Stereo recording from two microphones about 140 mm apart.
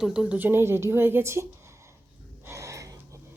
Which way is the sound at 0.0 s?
5° right (ahead or behind).